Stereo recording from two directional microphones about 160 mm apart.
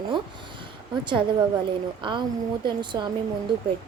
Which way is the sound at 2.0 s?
30° right (ahead or behind).